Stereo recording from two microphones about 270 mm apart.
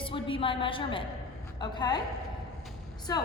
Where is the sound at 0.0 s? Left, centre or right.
Centre.